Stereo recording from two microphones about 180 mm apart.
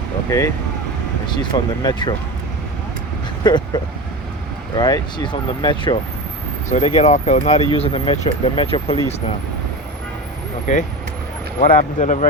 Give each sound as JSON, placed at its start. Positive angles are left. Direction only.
{"t": 0.3, "sound": "speech", "side_deg": 15}
{"t": 3.4, "sound": "speech", "side_deg": 25}
{"t": 4.8, "sound": "speech", "side_deg": 25}
{"t": 6.7, "sound": "speech", "side_deg": 40}
{"t": 10.7, "sound": "speech", "side_deg": 45}